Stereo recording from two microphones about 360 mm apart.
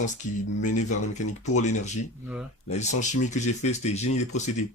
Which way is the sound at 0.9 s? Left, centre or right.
Centre.